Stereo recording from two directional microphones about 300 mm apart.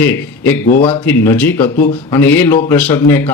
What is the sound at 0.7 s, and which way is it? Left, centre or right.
Speech, left.